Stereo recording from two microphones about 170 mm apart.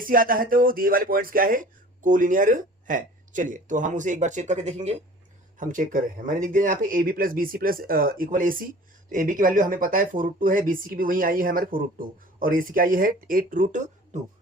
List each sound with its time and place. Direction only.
0.0 s speech: 55° right (ahead or behind)